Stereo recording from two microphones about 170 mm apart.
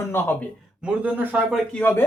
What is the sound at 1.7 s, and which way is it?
Speech, 10° left (ahead or behind).